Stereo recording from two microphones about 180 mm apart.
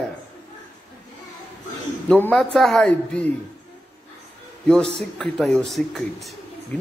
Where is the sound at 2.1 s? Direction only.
5° left (ahead or behind).